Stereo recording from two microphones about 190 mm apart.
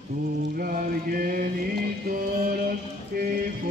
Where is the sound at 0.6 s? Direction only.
50° right (ahead or behind).